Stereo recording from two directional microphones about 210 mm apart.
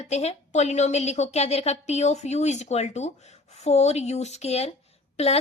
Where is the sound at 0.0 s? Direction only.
30° left (ahead or behind).